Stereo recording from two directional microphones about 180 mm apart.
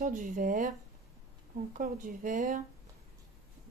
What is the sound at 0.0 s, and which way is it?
Speech, 45° right (ahead or behind).